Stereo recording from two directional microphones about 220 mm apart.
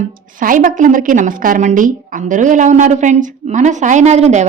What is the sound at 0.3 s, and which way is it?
A woman's voice, 40° right (ahead or behind).